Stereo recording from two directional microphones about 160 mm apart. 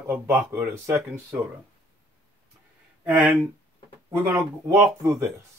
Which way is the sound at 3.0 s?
10° right (ahead or behind).